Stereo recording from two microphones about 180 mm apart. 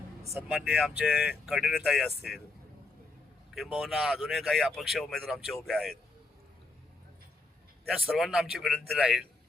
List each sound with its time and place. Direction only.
0.3 s speech: 5° right (ahead or behind)
3.5 s speech: centre (ahead or behind)
7.9 s speech: centre (ahead or behind)